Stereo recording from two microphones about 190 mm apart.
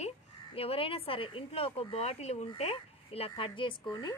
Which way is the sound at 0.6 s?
30° left (ahead or behind).